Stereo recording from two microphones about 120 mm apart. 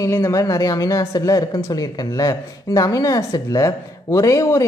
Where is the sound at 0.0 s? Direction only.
25° left (ahead or behind).